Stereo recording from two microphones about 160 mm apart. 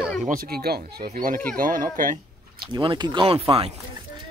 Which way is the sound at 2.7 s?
30° right (ahead or behind).